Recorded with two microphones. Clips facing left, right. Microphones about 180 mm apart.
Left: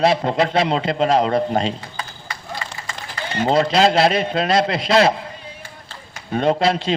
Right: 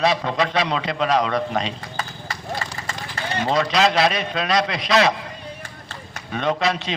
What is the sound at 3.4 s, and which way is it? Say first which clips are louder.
A man's voice: left 4 dB; 30° left (ahead or behind).